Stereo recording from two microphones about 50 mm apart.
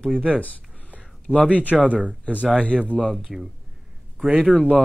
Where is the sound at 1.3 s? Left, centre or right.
Left.